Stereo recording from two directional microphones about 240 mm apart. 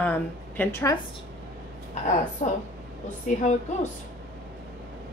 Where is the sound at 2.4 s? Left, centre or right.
Left.